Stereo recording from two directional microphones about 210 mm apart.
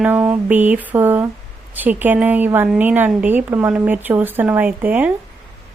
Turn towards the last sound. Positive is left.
turn(degrees=-5)  # may be behind; listen again after turning